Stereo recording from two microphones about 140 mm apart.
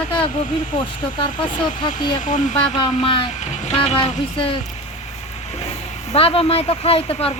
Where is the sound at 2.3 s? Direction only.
65° left (ahead or behind).